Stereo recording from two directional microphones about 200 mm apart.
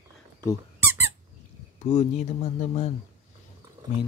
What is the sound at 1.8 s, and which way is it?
Speech, 35° left (ahead or behind).